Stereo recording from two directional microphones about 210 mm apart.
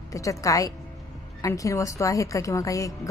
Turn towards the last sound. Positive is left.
turn(degrees=15)  # may be behind; listen again after turning